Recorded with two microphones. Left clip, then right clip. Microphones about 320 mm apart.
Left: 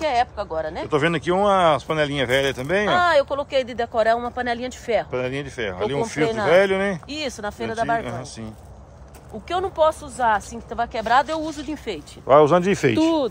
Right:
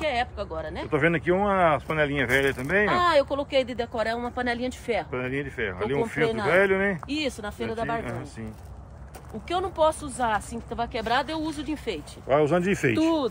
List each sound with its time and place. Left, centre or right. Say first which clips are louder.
0.1 s speech: left 7 dB; left
0.8 s speech: left 1 dB; centre
2.9 s speech: left 6 dB; left
5.1 s speech: left 4 dB; centre
7.1 s speech: left 2 dB; left
9.5 s speech: left 4 dB; left
12.3 s speech: left 8 dB; centre